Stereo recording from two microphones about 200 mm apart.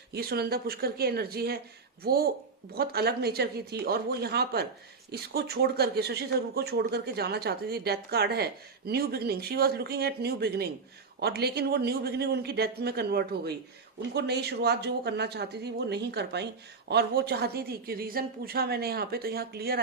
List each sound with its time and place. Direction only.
0.1 s speech: 50° right (ahead or behind)